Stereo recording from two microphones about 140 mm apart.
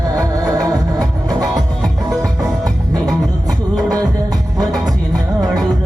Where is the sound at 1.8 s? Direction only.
Centre (ahead or behind).